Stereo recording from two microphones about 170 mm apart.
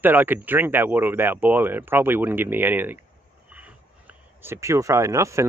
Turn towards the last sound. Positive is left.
turn(degrees=-15)  # may be behind; listen again after turning